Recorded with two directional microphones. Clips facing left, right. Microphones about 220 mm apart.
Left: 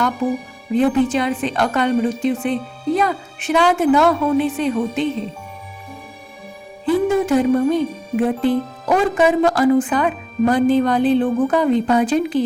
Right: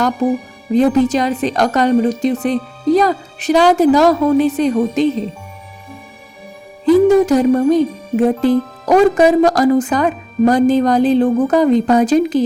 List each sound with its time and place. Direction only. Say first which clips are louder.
0.7 s music: right 4 dB; 40° right (ahead or behind)
6.8 s music: right 7 dB; 40° right (ahead or behind)